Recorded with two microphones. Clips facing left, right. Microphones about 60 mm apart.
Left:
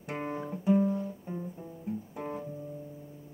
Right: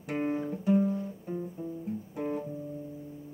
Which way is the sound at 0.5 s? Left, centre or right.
Centre.